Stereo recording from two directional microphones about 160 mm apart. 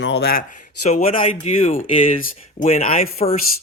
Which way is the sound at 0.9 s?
40° left (ahead or behind).